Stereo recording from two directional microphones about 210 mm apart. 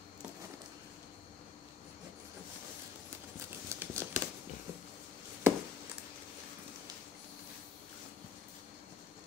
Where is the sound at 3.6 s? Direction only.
10° right (ahead or behind).